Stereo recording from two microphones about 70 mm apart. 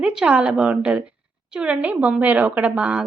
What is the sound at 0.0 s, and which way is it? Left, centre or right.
A woman's voice, centre.